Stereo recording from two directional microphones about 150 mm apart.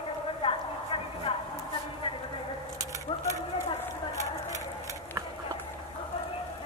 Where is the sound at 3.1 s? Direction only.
40° left (ahead or behind).